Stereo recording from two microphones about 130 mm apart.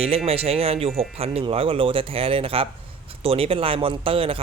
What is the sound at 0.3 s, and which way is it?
Speech, 50° right (ahead or behind).